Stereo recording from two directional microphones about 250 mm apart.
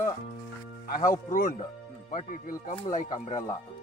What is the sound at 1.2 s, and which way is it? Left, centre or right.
Speech, left.